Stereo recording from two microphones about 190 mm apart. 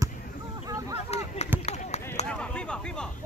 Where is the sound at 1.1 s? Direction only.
35° left (ahead or behind).